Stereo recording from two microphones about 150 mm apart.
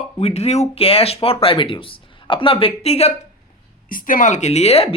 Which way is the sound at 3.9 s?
65° left (ahead or behind).